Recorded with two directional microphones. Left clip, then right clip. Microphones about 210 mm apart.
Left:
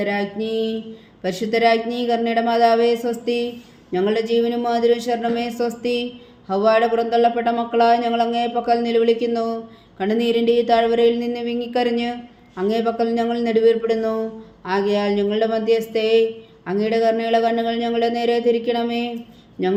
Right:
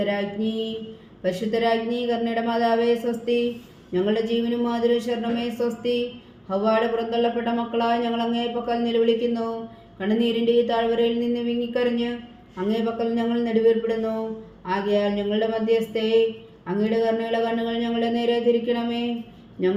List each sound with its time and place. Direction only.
0.0 s speech: 40° left (ahead or behind)